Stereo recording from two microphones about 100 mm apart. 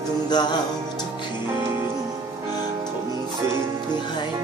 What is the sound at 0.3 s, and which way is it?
Music, 45° left (ahead or behind).